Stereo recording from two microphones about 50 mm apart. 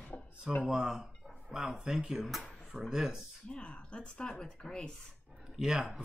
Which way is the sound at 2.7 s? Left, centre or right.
Centre.